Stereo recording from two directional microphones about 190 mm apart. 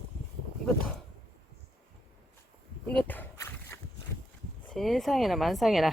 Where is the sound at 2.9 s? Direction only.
10° left (ahead or behind).